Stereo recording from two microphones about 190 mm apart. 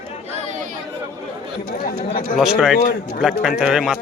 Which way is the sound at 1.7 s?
50° left (ahead or behind).